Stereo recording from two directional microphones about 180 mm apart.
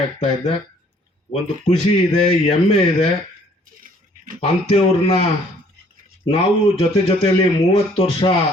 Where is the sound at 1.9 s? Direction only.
35° left (ahead or behind).